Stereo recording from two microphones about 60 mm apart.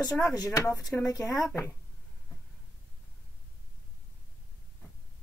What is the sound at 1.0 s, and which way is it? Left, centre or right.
Speech, left.